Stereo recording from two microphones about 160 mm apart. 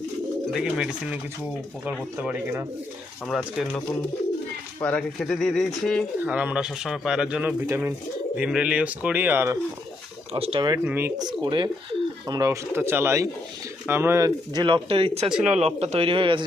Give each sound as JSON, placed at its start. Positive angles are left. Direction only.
{"t": 0.5, "sound": "speech", "side_deg": -5}
{"t": 3.2, "sound": "speech", "side_deg": 0}
{"t": 10.3, "sound": "a man's voice", "side_deg": -35}
{"t": 10.8, "sound": "speech", "side_deg": -10}
{"t": 11.2, "sound": "a man's voice", "side_deg": -25}